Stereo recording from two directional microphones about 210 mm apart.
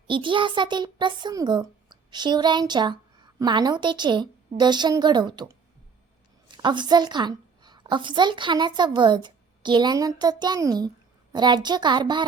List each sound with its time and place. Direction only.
0.1 s a child's voice: 25° right (ahead or behind)
6.5 s a woman's voice: 20° right (ahead or behind)